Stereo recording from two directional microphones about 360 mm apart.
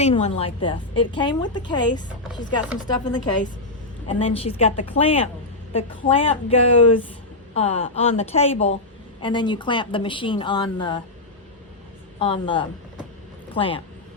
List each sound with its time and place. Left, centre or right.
0.0 s a woman's voice: centre
12.2 s a woman's voice: centre